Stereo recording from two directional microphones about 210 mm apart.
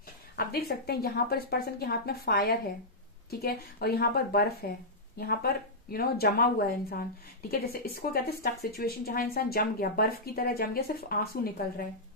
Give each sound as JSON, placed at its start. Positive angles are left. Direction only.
{"t": 0.4, "sound": "speech", "side_deg": 45}